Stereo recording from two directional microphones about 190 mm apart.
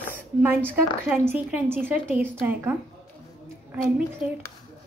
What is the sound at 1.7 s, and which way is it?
A woman's voice, 10° right (ahead or behind).